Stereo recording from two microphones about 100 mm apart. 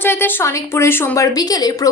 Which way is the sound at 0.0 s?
20° left (ahead or behind).